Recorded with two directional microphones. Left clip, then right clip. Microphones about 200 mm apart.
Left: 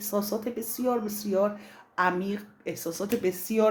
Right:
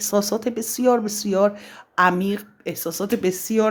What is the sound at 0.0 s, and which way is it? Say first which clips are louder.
Speech: right 8 dB; 45° right (ahead or behind).